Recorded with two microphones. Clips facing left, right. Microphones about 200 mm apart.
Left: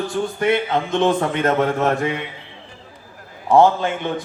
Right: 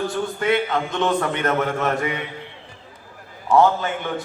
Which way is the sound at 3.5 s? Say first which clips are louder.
Left 3 dB; 30° left (ahead or behind).